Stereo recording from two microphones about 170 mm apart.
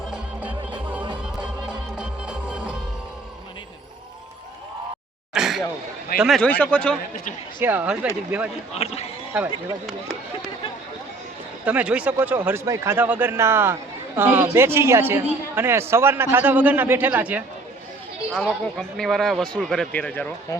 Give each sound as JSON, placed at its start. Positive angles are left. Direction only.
{"t": 1.2, "sound": "music", "side_deg": -5}
{"t": 5.3, "sound": "a sound", "side_deg": 0}
{"t": 6.1, "sound": "speech", "side_deg": 0}
{"t": 7.6, "sound": "a woman's voice", "side_deg": -10}
{"t": 8.7, "sound": "speech", "side_deg": 40}
{"t": 9.3, "sound": "speech", "side_deg": -5}
{"t": 11.6, "sound": "a woman's voice", "side_deg": -10}
{"t": 18.3, "sound": "speech", "side_deg": 5}